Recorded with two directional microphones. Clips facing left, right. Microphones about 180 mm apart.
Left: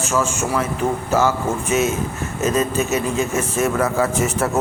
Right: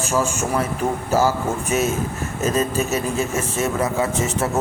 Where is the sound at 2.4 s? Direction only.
35° right (ahead or behind).